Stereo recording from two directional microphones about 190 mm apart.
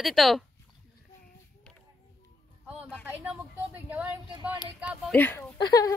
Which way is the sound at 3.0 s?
10° right (ahead or behind).